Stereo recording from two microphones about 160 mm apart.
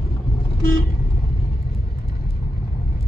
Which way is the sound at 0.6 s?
65° left (ahead or behind).